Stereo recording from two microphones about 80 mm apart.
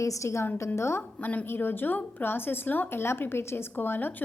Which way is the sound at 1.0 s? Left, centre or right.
Left.